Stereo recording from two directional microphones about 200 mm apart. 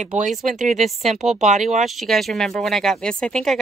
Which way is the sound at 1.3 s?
35° right (ahead or behind).